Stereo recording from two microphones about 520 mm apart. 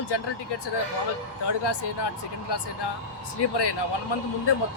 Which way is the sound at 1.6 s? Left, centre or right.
Left.